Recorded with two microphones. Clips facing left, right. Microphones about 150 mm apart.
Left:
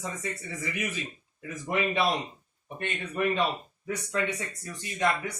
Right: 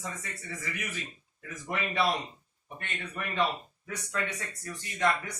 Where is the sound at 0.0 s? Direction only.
20° left (ahead or behind).